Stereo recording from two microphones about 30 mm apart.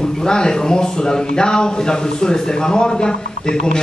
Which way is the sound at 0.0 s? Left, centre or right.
Left.